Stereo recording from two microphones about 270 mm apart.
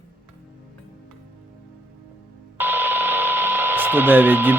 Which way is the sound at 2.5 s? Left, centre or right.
Centre.